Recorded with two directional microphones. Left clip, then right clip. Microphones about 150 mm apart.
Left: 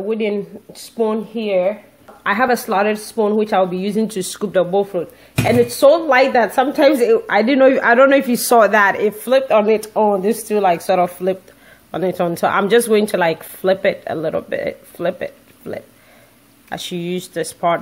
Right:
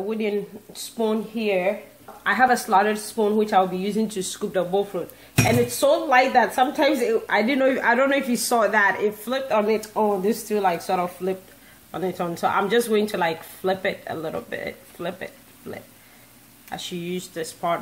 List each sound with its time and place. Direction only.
0.1 s speech: 50° left (ahead or behind)
2.2 s a woman's voice: 50° left (ahead or behind)